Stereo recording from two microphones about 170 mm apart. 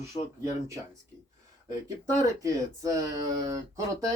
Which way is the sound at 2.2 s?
20° right (ahead or behind).